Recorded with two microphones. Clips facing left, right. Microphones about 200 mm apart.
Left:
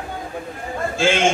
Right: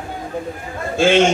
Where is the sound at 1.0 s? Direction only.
55° right (ahead or behind).